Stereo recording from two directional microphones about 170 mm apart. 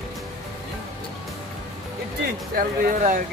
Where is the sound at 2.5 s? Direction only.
55° right (ahead or behind).